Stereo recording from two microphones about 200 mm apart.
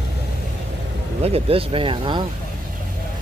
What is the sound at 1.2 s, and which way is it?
Speech, 30° right (ahead or behind).